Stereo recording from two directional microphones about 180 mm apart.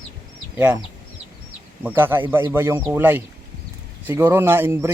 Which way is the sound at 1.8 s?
10° right (ahead or behind).